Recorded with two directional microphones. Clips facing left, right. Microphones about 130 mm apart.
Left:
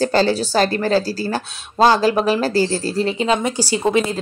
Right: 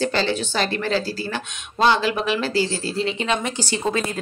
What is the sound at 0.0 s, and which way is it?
Speech, 40° left (ahead or behind).